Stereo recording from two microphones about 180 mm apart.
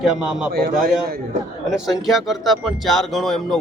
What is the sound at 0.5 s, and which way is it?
Speech, 55° right (ahead or behind).